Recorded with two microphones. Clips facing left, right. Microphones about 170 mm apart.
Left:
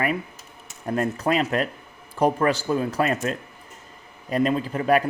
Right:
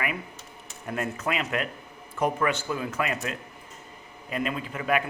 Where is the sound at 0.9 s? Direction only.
35° left (ahead or behind).